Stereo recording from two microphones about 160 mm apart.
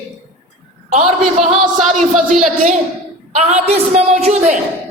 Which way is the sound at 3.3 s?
40° right (ahead or behind).